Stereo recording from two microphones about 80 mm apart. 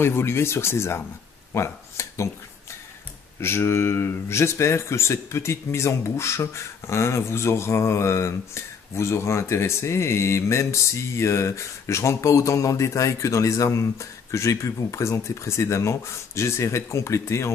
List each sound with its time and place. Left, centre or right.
0.0 s speech: left
3.3 s speech: left